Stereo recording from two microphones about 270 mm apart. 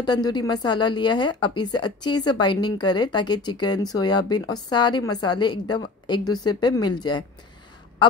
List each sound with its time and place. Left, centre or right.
0.0 s speech: centre